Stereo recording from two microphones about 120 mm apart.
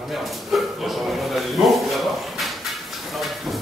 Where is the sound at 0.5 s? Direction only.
Centre (ahead or behind).